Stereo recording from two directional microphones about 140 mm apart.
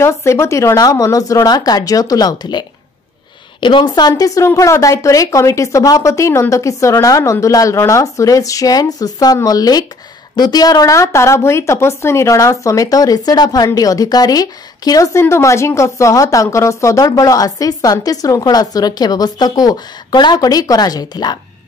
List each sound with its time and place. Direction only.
0.0 s a woman's voice: 20° left (ahead or behind)
3.6 s a woman's voice: 35° left (ahead or behind)
4.1 s a woman's voice: 20° left (ahead or behind)